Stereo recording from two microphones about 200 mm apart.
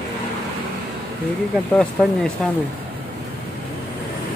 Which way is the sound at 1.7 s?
5° left (ahead or behind).